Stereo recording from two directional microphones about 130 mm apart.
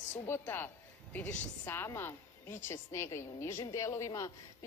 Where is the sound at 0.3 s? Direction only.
15° left (ahead or behind).